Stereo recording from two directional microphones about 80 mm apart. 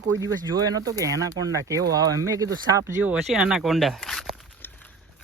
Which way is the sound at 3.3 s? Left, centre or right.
Centre.